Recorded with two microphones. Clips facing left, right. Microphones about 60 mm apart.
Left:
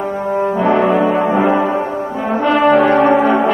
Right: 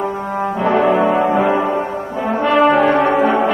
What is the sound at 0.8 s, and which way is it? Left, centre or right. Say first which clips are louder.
Brass instrument: even; centre.